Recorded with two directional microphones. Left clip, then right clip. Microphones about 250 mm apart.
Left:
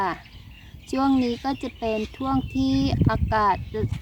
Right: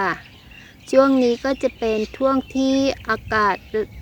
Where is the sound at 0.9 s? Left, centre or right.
Centre.